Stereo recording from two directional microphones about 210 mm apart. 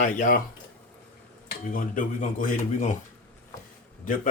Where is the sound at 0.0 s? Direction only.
40° left (ahead or behind).